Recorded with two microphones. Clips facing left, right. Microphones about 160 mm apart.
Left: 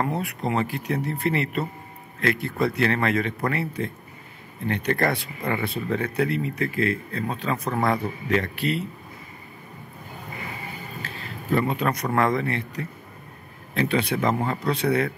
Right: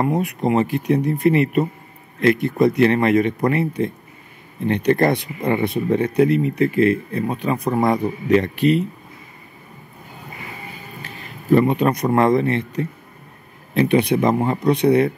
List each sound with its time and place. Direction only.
0.0 s speech: 15° right (ahead or behind)
11.5 s speech: 20° right (ahead or behind)